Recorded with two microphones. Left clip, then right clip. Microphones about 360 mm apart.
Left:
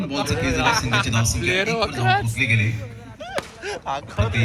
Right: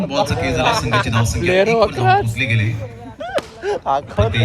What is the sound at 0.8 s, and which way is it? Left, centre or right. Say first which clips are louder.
Speech: right 4 dB; right.